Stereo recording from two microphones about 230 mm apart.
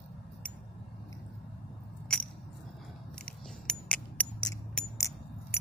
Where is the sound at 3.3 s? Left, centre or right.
Centre.